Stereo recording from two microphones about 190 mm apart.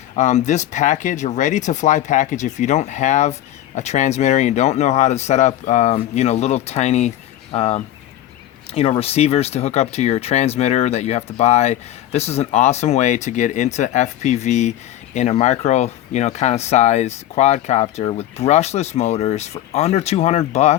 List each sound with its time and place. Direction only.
0.2 s speech: 40° left (ahead or behind)